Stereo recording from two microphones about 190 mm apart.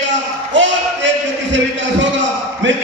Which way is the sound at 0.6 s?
75° right (ahead or behind).